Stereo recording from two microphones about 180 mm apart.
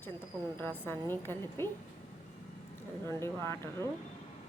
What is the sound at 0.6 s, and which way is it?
A woman's voice, 10° left (ahead or behind).